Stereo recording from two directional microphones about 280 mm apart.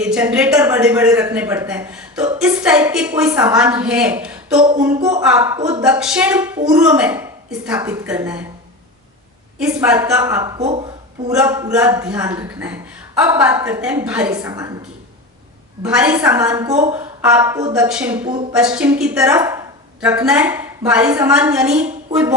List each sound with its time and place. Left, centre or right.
0.0 s a man's voice: centre
5.8 s a man's voice: centre
9.6 s a man's voice: centre
10.6 s speech: right
11.3 s a man's voice: centre
15.8 s a woman's voice: centre